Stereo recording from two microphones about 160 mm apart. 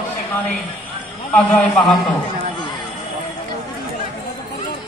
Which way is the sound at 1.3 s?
5° left (ahead or behind).